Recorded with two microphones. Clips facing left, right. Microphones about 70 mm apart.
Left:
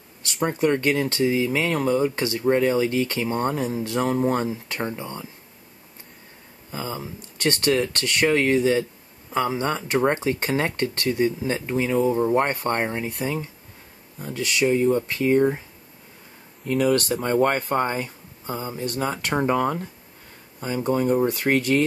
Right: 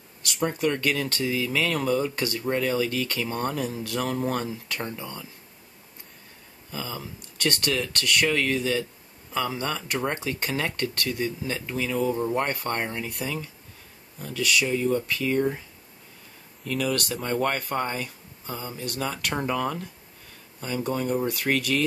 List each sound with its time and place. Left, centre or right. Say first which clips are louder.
0.5 s speech: left 5 dB; left
6.7 s speech: left 4 dB; left
16.6 s speech: left 6 dB; left